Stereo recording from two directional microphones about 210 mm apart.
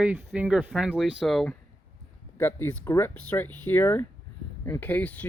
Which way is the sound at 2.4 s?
10° left (ahead or behind).